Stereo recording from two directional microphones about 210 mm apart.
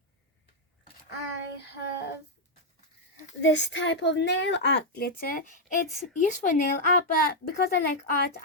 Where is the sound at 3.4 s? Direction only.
60° left (ahead or behind); by 7.8 s 45° left (ahead or behind).